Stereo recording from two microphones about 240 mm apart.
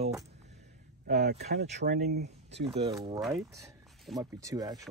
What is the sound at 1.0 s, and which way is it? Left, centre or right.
Speech, right.